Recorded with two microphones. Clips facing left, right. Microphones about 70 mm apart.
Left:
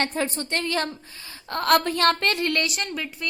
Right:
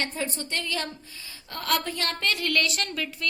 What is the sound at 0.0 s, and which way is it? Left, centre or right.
Speech, left.